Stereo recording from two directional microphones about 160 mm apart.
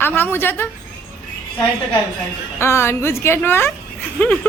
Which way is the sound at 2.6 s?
15° left (ahead or behind).